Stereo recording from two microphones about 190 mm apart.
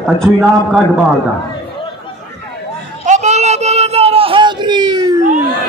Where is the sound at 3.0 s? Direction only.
40° right (ahead or behind); by 5.1 s 20° right (ahead or behind).